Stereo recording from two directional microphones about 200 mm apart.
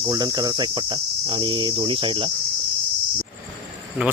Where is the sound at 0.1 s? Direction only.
20° right (ahead or behind).